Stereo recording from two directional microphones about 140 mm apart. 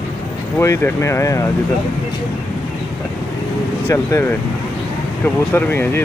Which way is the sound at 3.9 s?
25° left (ahead or behind).